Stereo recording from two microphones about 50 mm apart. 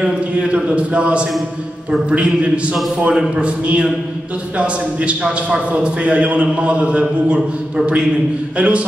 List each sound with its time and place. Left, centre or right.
0.0 s a man's voice: right